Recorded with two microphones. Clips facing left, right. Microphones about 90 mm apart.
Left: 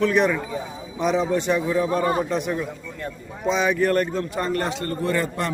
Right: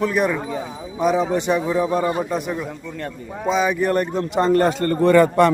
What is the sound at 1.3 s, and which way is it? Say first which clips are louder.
Speech: right 2 dB; 15° right (ahead or behind).